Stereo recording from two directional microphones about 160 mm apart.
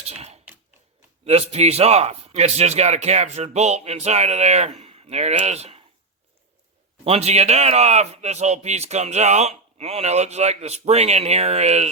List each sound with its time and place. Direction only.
0.0 s a man's voice: 40° right (ahead or behind)
7.0 s a man's voice: 40° right (ahead or behind)